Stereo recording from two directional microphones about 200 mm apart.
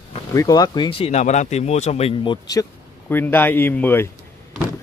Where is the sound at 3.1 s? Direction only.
10° left (ahead or behind).